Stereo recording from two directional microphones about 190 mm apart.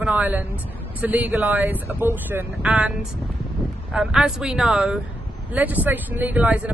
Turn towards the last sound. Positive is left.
turn(degrees=-5)  # may be behind; listen again after turning